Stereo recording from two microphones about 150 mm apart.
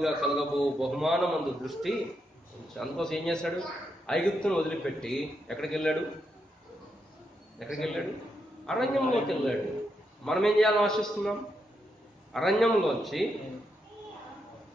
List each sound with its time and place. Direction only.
0.0 s a man's voice: centre (ahead or behind)
7.5 s a man's voice: centre (ahead or behind)